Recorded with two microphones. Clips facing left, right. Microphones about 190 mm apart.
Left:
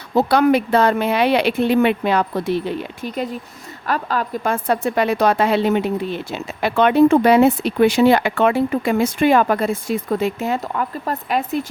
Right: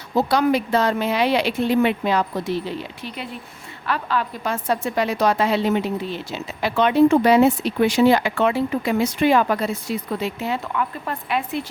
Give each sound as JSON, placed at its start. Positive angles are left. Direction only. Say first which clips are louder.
{"t": 0.2, "sound": "a woman's voice", "louder": "left 4 dB", "side_deg": 60}